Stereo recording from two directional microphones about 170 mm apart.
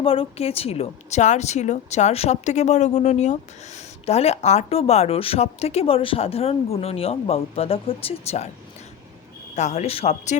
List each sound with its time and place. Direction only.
0.0 s a woman's voice: 35° left (ahead or behind)
9.6 s a woman's voice: 40° left (ahead or behind)